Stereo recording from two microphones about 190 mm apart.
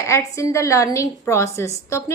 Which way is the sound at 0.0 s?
15° left (ahead or behind).